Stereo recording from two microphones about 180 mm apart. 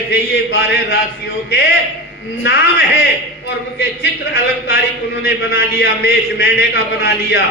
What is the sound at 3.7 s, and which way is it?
A man's voice, 65° left (ahead or behind).